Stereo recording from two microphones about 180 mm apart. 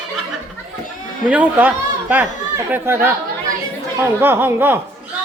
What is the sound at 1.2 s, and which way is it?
Speech, 10° right (ahead or behind).